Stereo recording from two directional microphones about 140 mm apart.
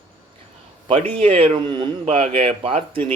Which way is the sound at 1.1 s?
45° right (ahead or behind).